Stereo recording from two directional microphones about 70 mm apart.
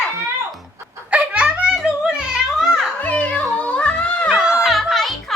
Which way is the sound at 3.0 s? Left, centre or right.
Left.